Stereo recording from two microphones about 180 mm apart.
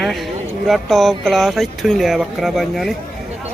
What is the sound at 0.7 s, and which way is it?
Speech, centre (ahead or behind).